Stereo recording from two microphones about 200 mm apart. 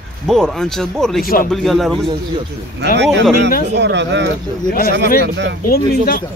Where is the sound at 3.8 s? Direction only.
60° right (ahead or behind).